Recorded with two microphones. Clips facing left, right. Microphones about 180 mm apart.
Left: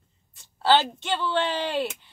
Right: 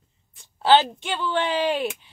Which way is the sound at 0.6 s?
15° right (ahead or behind).